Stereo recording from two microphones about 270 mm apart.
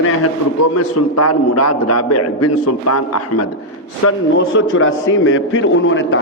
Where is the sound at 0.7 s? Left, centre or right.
Left.